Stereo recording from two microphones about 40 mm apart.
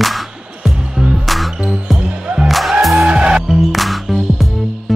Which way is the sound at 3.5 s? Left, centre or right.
Centre.